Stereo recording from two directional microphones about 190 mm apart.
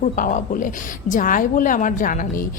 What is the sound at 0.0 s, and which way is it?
Speech, 40° left (ahead or behind).